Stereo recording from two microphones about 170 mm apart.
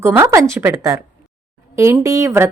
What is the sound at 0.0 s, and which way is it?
A woman's voice, 15° right (ahead or behind).